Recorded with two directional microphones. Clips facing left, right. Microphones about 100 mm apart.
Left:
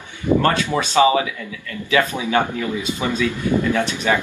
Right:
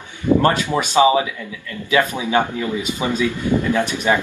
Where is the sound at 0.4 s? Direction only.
20° right (ahead or behind).